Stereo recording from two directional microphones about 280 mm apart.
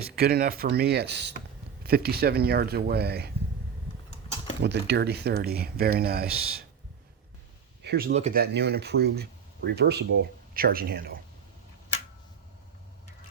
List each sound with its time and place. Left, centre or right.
0.0 s speech: right
4.6 s speech: right
7.8 s speech: right